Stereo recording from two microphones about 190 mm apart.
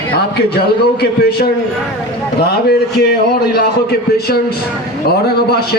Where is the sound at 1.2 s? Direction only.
60° left (ahead or behind).